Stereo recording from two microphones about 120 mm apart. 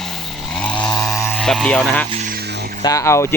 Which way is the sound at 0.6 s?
10° left (ahead or behind).